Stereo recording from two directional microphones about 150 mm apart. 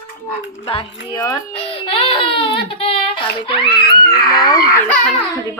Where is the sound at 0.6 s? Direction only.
35° left (ahead or behind).